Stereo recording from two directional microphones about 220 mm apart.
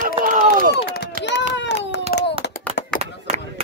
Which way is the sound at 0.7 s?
50° left (ahead or behind).